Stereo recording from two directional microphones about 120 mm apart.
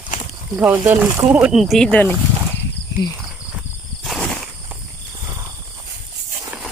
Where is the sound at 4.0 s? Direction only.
5° left (ahead or behind).